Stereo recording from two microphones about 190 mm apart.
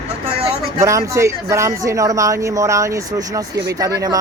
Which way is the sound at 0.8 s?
15° right (ahead or behind).